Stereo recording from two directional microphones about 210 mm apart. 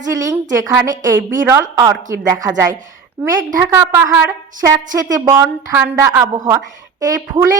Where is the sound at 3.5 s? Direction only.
15° right (ahead or behind).